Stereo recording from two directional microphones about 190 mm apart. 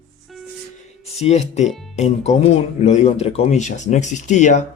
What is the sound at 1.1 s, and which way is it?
Speech, 35° left (ahead or behind).